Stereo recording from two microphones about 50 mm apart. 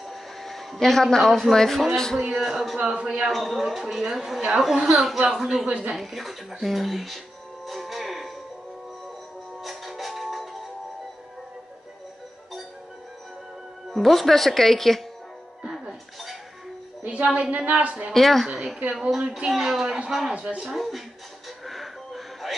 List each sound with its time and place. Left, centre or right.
0.1 s a sound: centre
1.5 s speech: centre
2.3 s speech: centre
2.8 s a woman's voice: right
3.3 s a man's voice: centre
7.6 s music: centre
9.6 s music: centre
13.9 s speech: centre
15.7 s music: centre
17.0 s a woman's voice: right
18.1 s speech: centre
18.5 s a man's voice: centre
21.6 s a sound: centre